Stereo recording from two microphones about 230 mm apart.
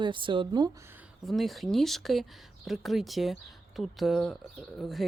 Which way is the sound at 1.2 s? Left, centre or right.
Centre.